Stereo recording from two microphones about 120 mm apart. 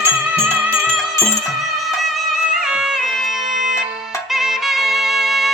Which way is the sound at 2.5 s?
5° right (ahead or behind).